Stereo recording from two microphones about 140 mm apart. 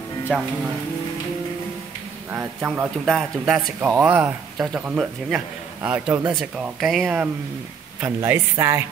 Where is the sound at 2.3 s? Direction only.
15° right (ahead or behind).